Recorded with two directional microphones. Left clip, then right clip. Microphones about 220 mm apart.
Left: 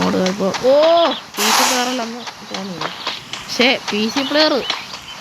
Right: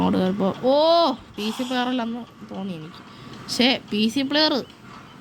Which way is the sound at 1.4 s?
45° left (ahead or behind).